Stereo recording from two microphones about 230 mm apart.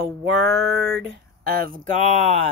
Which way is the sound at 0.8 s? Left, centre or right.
Right.